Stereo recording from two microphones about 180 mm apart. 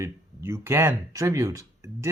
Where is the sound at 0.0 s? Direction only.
15° right (ahead or behind).